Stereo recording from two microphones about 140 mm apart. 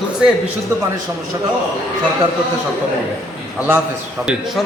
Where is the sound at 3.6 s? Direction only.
15° right (ahead or behind).